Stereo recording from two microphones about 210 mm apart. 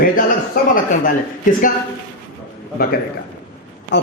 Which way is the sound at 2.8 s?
45° left (ahead or behind).